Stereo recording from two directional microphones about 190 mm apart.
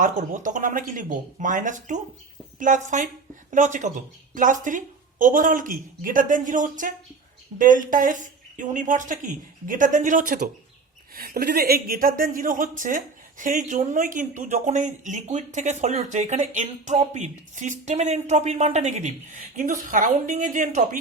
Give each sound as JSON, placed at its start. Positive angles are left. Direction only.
{"t": 0.0, "sound": "speech", "side_deg": -40}